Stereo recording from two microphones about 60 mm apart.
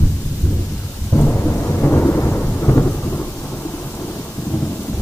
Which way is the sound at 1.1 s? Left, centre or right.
Left.